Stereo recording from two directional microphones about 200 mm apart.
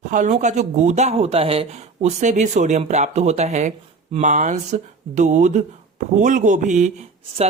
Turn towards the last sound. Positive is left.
turn(degrees=-35)  # may be behind; listen again after turning